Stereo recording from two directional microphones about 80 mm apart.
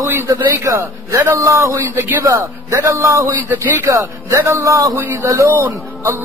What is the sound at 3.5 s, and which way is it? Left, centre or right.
Speech, right.